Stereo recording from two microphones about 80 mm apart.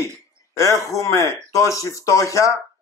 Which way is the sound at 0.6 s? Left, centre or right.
Left.